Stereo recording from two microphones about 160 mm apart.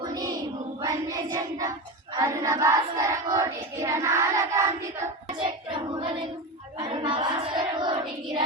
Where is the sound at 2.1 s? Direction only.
20° right (ahead or behind).